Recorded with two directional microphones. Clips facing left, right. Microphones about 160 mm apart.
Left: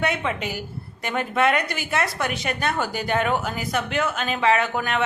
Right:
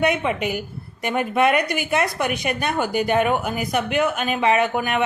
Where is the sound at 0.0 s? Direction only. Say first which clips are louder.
Right 4 dB; 15° right (ahead or behind).